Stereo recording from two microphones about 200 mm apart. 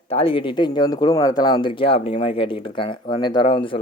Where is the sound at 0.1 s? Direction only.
25° left (ahead or behind).